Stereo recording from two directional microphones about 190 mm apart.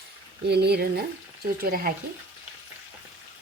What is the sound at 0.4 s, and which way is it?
Speech, 60° right (ahead or behind).